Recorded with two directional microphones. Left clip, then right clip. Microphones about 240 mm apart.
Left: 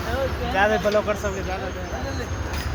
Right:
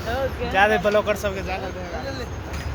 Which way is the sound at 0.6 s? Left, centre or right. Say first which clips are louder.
Right 2 dB; right.